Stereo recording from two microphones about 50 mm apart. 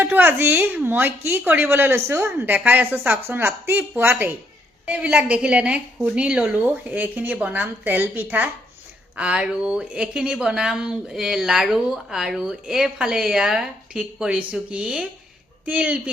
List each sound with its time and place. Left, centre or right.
0.0 s a sound: right
0.5 s speech: right
1.5 s a woman's voice: right
1.7 s a woman's voice: right
2.4 s a woman's voice: right
4.9 s a woman's voice: right
6.5 s a woman's voice: right
9.1 s a woman's voice: right